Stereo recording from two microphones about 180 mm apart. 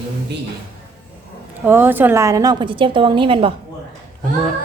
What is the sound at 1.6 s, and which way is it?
A woman's voice, 10° right (ahead or behind).